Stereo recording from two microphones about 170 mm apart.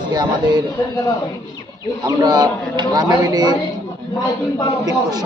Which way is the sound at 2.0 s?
25° right (ahead or behind).